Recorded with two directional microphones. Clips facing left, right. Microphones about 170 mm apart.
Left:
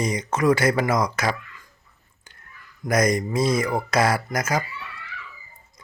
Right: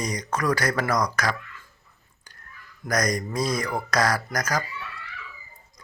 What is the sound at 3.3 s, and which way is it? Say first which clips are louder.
Speech: left 4 dB; 25° left (ahead or behind).